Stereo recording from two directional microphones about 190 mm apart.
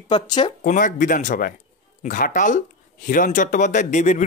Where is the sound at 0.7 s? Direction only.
45° left (ahead or behind).